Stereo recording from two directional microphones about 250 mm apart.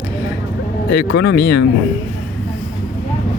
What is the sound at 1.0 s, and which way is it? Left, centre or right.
Speech, left.